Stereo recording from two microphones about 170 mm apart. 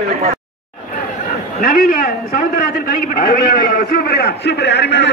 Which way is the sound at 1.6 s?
65° left (ahead or behind).